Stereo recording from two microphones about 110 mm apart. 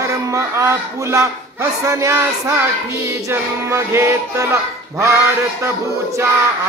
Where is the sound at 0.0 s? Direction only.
30° right (ahead or behind).